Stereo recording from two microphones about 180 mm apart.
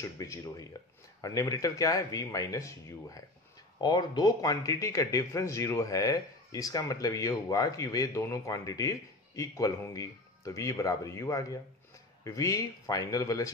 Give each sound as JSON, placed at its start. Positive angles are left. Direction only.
{"t": 0.0, "sound": "speech", "side_deg": 15}